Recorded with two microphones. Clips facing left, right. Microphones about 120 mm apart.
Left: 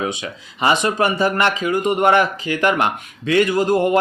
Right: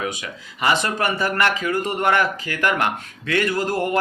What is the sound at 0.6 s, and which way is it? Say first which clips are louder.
Speech: left 4 dB; 20° left (ahead or behind).